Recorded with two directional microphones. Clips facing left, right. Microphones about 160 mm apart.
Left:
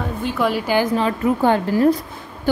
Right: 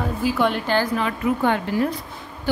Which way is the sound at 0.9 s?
35° left (ahead or behind).